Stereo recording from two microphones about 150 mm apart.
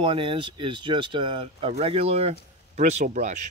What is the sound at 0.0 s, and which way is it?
A man's voice, 35° right (ahead or behind).